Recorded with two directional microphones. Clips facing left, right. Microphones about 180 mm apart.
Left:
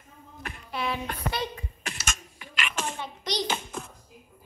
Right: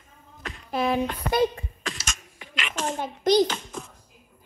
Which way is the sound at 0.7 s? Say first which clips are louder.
Right 7 dB; 45° right (ahead or behind).